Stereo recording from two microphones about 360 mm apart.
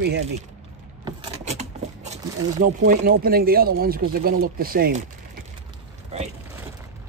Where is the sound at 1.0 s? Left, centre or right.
Centre.